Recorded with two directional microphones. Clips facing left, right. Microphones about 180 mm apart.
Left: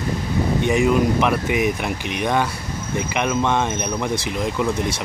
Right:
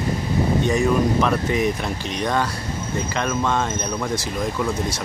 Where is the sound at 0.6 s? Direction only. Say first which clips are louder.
Left 3 dB; 15° left (ahead or behind).